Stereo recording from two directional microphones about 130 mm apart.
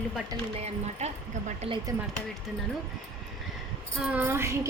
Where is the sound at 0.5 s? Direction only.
55° right (ahead or behind).